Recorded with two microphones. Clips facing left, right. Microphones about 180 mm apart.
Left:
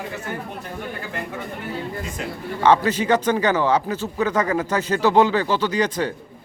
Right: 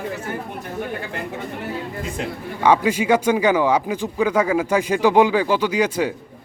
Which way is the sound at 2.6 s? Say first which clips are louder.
Right 1 dB; 10° right (ahead or behind).